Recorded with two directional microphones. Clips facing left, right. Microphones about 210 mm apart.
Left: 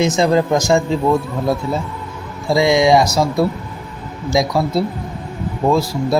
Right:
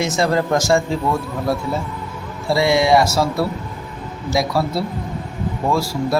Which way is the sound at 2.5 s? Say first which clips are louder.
Left 2 dB; 15° left (ahead or behind).